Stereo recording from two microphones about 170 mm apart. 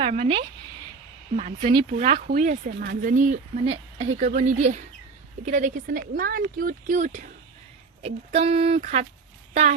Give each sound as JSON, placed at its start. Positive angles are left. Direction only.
{"t": 0.0, "sound": "speech", "side_deg": -40}
{"t": 2.6, "sound": "speech", "side_deg": -65}
{"t": 8.0, "sound": "speech", "side_deg": -35}